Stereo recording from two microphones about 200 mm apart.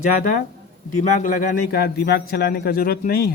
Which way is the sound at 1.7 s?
50° left (ahead or behind).